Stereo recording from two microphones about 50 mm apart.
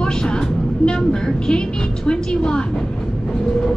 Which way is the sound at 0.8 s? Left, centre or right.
Centre.